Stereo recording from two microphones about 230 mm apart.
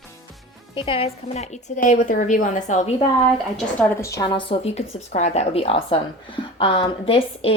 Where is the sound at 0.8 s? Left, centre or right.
Left.